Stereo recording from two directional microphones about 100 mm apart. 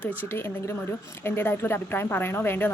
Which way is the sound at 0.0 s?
25° left (ahead or behind).